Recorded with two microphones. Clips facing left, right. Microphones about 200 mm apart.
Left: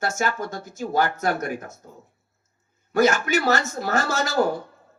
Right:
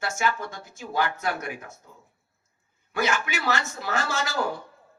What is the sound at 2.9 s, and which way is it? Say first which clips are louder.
Speech: left 8 dB; 40° left (ahead or behind).